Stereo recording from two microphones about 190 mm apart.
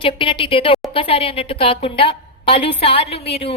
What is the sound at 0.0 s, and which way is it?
A woman's voice, 25° left (ahead or behind).